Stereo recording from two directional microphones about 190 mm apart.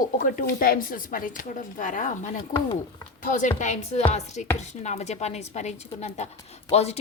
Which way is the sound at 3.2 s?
40° left (ahead or behind).